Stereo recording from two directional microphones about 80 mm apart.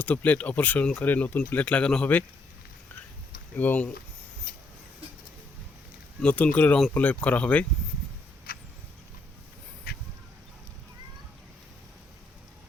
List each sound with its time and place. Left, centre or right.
0.0 s speech: centre
3.6 s speech: centre
6.2 s speech: centre